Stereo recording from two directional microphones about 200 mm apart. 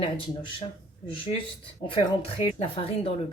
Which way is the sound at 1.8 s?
25° left (ahead or behind).